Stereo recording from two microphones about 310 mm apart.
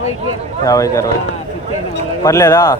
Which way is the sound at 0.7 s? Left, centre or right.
Centre.